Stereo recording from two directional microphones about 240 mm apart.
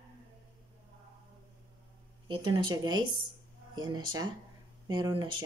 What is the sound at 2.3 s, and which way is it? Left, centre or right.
Speech, centre.